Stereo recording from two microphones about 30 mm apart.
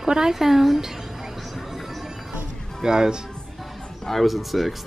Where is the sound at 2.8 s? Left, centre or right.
Right.